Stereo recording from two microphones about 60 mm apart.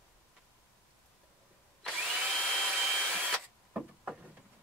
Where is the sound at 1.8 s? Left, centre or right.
Centre.